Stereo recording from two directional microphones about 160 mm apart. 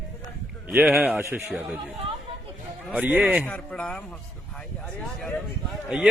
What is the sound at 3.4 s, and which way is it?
Speech, 5° left (ahead or behind).